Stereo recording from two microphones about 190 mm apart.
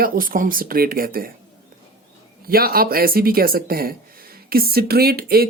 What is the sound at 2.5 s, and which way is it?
Speech, 50° right (ahead or behind).